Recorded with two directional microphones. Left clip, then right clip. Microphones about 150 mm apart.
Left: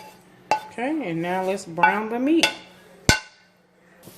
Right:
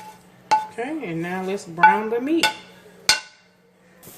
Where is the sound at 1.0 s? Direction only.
65° left (ahead or behind).